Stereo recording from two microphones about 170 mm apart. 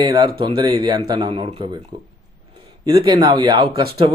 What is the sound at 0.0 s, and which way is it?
Speech, 25° right (ahead or behind).